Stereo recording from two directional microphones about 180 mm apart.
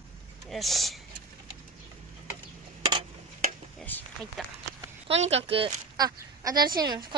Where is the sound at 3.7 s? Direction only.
10° left (ahead or behind).